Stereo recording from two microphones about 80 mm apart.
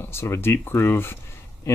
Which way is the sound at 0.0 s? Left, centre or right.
Left.